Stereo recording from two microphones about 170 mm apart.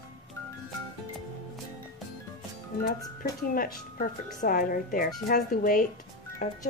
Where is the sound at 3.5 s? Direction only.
55° left (ahead or behind).